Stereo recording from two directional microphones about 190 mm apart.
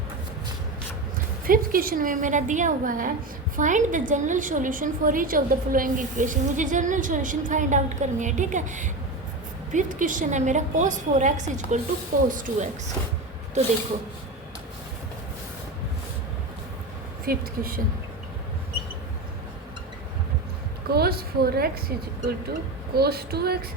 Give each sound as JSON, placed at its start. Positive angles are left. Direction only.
{"t": 1.5, "sound": "a woman's voice", "side_deg": -50}
{"t": 17.2, "sound": "a woman's voice", "side_deg": -50}
{"t": 20.9, "sound": "speech", "side_deg": -55}